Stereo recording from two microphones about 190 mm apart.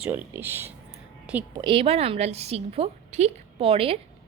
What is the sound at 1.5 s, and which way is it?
A woman's voice, 25° right (ahead or behind).